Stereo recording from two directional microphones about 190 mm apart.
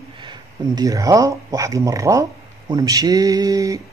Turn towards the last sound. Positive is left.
turn(degrees=-20)  # may be behind; listen again after turning